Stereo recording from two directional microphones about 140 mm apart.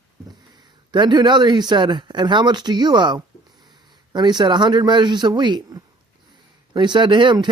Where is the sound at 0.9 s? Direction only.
30° right (ahead or behind).